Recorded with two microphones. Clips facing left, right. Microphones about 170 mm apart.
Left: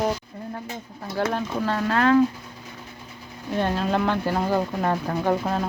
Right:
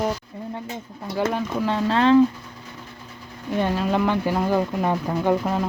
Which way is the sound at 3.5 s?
10° right (ahead or behind).